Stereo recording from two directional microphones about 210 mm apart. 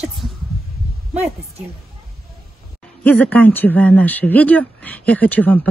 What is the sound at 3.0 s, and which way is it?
Speech, 5° left (ahead or behind).